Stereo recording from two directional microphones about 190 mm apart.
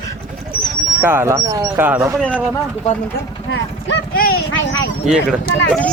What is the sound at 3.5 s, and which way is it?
Speech, 65° left (ahead or behind).